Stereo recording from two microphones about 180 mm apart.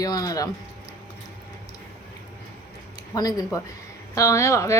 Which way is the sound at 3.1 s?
20° left (ahead or behind).